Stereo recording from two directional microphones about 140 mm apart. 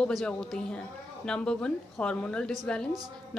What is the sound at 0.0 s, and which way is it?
A woman's voice, 5° left (ahead or behind).